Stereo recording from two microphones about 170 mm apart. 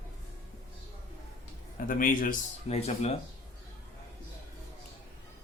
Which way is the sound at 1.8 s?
55° left (ahead or behind).